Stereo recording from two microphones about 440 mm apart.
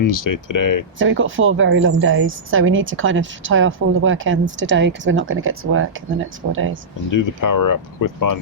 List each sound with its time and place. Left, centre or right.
0.0 s speech: left
0.9 s a woman's voice: right
7.1 s speech: left